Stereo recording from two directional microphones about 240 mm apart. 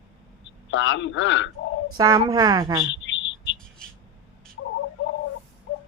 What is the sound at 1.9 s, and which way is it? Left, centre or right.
Speech, centre.